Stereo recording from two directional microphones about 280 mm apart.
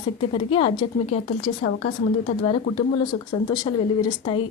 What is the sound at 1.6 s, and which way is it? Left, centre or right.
Speech, left.